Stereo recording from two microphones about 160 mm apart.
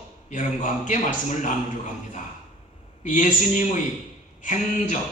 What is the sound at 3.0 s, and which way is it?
A man's voice, 50° left (ahead or behind).